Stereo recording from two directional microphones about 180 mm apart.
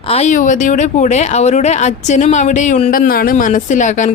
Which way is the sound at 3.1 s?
55° left (ahead or behind).